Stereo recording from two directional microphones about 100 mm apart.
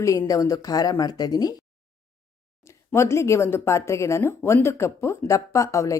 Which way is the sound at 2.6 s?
25° left (ahead or behind).